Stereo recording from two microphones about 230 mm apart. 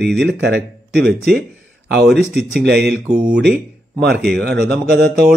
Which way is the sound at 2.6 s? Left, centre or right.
Right.